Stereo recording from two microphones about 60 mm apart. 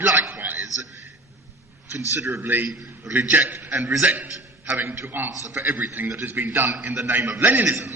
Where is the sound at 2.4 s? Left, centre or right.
Right.